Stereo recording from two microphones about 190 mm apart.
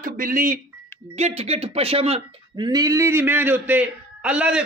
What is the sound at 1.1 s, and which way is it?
Speech, 35° right (ahead or behind).